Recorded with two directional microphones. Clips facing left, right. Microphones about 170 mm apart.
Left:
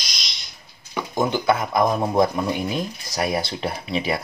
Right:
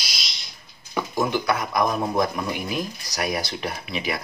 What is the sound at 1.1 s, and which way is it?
Speech, 25° left (ahead or behind).